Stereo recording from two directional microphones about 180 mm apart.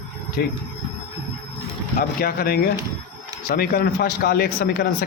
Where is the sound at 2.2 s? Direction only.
55° left (ahead or behind).